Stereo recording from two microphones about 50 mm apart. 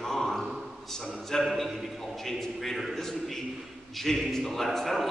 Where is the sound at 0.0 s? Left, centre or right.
Centre.